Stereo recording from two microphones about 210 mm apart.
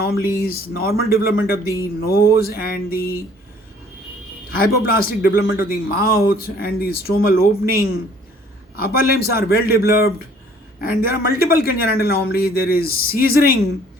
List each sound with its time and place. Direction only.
0.0 s speech: 45° left (ahead or behind)
1.6 s speech: 15° right (ahead or behind)
2.0 s speech: 45° left (ahead or behind)
4.9 s speech: 45° left (ahead or behind)